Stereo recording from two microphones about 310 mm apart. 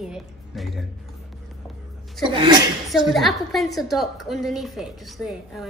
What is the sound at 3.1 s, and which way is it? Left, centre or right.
A woman's voice, centre.